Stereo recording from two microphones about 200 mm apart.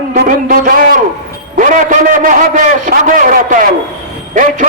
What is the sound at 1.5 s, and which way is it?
A man's voice, 40° right (ahead or behind).